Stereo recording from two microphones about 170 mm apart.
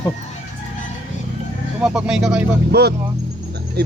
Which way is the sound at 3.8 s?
70° right (ahead or behind).